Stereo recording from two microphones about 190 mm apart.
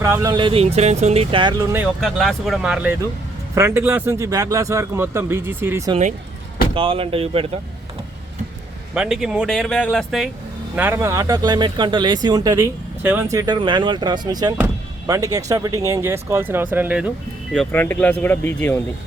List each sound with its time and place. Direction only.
0.0 s speech: 15° right (ahead or behind)
2.0 s a man's voice: centre (ahead or behind)
6.7 s speech: 30° right (ahead or behind)
9.0 s speech: 5° right (ahead or behind)
10.8 s a man's voice: 10° right (ahead or behind)
17.5 s speech: 5° left (ahead or behind)